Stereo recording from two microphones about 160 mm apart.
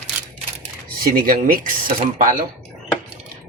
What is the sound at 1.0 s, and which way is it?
Speech, 65° right (ahead or behind).